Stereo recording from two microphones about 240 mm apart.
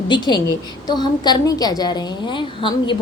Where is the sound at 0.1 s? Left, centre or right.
Centre.